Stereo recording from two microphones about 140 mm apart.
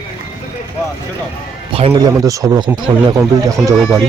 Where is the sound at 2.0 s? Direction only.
25° right (ahead or behind).